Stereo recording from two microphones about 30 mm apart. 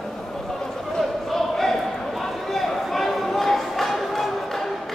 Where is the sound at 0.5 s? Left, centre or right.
Centre.